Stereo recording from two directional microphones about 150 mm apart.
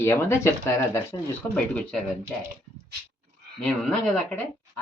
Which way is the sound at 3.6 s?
5° left (ahead or behind).